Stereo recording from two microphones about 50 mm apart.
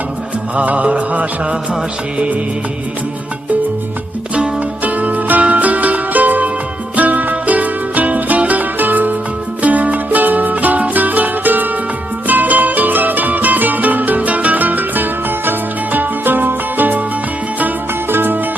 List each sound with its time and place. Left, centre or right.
0.5 s music: right
4.8 s music: right
18.1 s music: right